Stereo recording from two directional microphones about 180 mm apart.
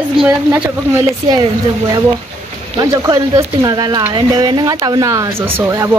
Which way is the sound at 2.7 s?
25° right (ahead or behind).